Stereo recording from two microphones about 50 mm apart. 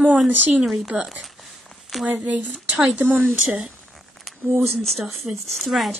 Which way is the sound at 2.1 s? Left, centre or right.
Right.